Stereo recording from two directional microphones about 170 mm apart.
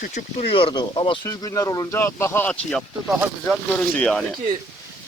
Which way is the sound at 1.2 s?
20° left (ahead or behind).